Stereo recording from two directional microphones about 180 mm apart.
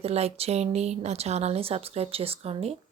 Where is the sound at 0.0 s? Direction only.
35° right (ahead or behind).